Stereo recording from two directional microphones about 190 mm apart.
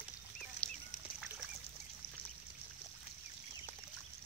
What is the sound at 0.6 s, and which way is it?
Duck, 5° left (ahead or behind).